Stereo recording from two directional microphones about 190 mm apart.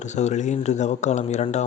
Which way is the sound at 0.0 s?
40° left (ahead or behind).